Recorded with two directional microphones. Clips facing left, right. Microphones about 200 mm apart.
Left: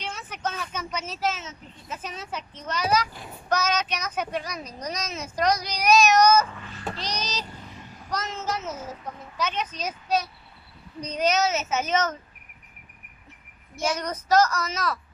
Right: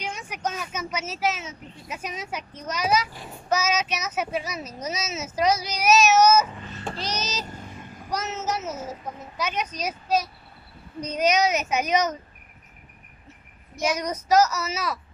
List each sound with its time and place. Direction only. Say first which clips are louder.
0.0 s speech: right 2 dB; 10° right (ahead or behind)
7.1 s a sound: right 2 dB; 5° right (ahead or behind)
7.4 s vehicle: right 3 dB; 45° right (ahead or behind)
8.1 s speech: right 2 dB; 10° right (ahead or behind)
11.0 s speech: right 2 dB; 10° right (ahead or behind)
13.8 s speech: right 2 dB; 10° right (ahead or behind)